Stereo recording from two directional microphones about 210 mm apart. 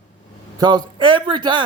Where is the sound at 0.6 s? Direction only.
20° right (ahead or behind).